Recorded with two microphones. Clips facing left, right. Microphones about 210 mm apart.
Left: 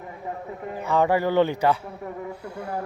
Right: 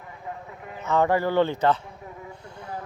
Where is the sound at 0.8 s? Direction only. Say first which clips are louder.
Left 1 dB; 15° left (ahead or behind).